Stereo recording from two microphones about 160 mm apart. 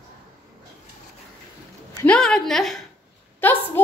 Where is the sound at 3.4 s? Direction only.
10° left (ahead or behind).